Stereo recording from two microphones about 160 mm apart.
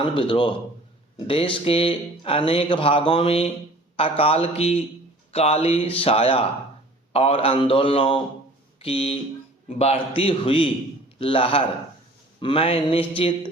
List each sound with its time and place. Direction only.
0.0 s speech: 30° left (ahead or behind)